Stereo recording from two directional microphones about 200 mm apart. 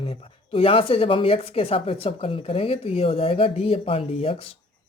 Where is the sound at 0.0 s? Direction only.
30° left (ahead or behind).